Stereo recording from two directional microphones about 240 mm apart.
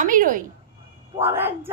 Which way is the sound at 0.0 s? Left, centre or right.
Right.